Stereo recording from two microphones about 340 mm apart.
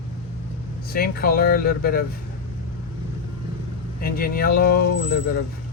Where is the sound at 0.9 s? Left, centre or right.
Left.